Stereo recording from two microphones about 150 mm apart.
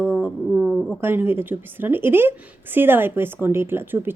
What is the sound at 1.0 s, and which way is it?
Speech, 15° right (ahead or behind).